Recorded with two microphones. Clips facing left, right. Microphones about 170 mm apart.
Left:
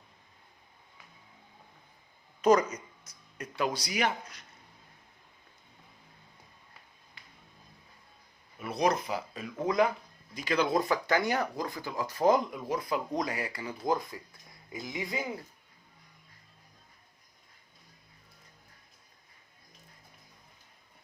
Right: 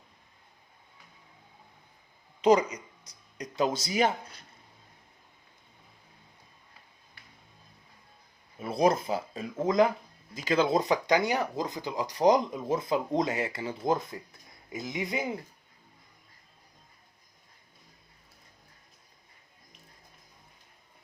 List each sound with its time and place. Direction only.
2.4 s speech: 15° right (ahead or behind); by 4.4 s 30° right (ahead or behind)
8.5 s speech: 30° right (ahead or behind)